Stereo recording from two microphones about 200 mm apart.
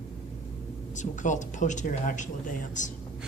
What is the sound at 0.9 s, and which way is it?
Speech, 40° left (ahead or behind).